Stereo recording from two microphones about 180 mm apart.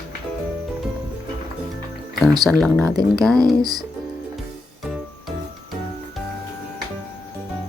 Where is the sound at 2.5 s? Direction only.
5° left (ahead or behind).